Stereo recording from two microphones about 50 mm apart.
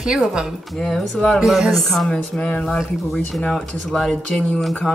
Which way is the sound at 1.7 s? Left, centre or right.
Centre.